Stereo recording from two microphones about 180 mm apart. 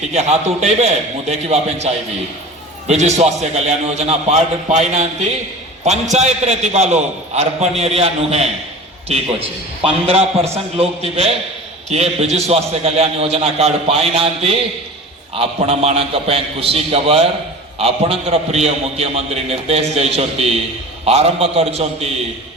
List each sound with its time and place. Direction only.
0.1 s a man's voice: 40° right (ahead or behind)
9.8 s a man's voice: 35° right (ahead or behind)